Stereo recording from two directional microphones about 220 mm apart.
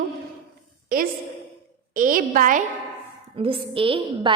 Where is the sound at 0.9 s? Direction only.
40° right (ahead or behind).